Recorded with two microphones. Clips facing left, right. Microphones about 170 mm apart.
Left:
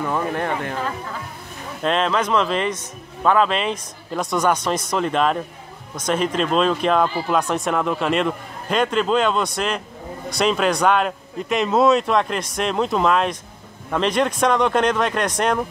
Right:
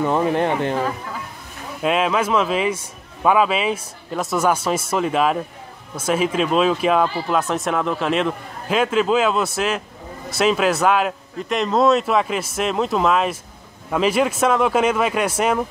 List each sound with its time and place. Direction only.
0.0 s speech: 20° right (ahead or behind)
1.8 s speech: 10° right (ahead or behind)